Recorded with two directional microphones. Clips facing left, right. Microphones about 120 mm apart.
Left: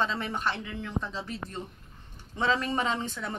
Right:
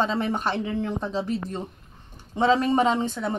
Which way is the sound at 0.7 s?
40° right (ahead or behind).